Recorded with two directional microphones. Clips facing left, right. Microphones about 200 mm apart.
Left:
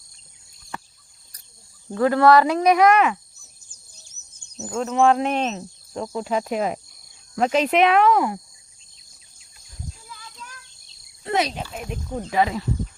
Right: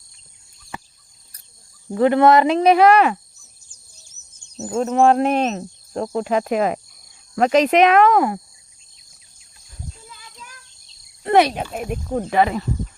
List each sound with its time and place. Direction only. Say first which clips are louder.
0.7 s a sound: right 1 dB; centre (ahead or behind)
2.0 s speech: right 2 dB; 20° right (ahead or behind)
4.5 s speech: right 4 dB; 40° right (ahead or behind); by 7.7 s 80° right
7.7 s speech: right 1 dB; 45° right (ahead or behind)
11.2 s speech: right 8 dB; 60° right (ahead or behind)